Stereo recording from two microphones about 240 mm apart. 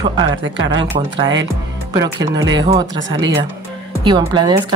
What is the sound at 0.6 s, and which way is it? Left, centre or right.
Speech, centre.